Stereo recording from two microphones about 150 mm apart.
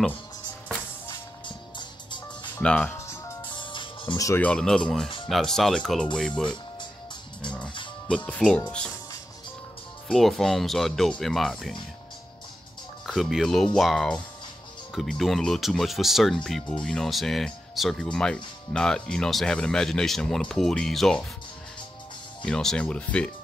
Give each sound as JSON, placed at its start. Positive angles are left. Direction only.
{"t": 1.0, "sound": "music", "side_deg": 30}
{"t": 2.6, "sound": "speech", "side_deg": 5}
{"t": 3.4, "sound": "music", "side_deg": 30}
{"t": 4.4, "sound": "speech", "side_deg": 5}
{"t": 8.3, "sound": "speech", "side_deg": 5}
{"t": 10.0, "sound": "speech", "side_deg": 0}
{"t": 13.0, "sound": "speech", "side_deg": 0}
{"t": 22.4, "sound": "speech", "side_deg": 5}